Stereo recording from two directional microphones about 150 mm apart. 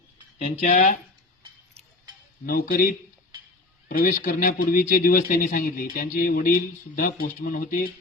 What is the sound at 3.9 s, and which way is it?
Speech, 70° left (ahead or behind).